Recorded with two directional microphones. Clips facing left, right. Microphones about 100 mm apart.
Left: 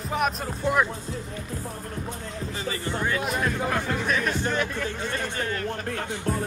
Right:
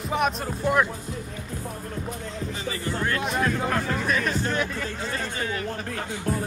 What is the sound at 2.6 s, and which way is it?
Music, 35° left (ahead or behind).